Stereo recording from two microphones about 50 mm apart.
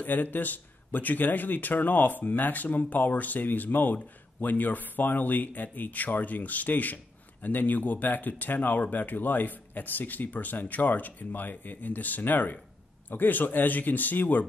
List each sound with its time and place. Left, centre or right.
0.0 s speech: left